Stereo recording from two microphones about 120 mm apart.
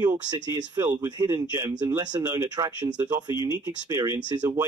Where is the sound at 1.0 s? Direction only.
35° right (ahead or behind).